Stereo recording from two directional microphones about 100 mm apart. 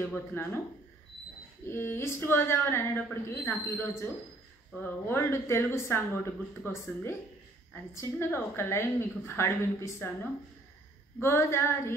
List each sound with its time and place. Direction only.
0.3 s a woman's voice: 20° left (ahead or behind)
1.7 s a woman's voice: 25° left (ahead or behind)